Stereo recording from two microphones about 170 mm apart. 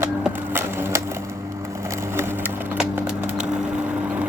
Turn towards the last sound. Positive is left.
turn(degrees=-10)  # may be behind; listen again after turning